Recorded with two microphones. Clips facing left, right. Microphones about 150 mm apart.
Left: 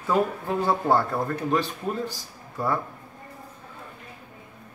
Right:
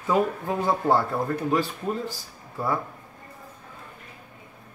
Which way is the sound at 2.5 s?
10° right (ahead or behind).